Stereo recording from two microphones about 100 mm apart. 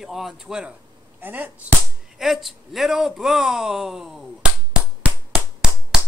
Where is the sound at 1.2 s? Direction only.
20° right (ahead or behind).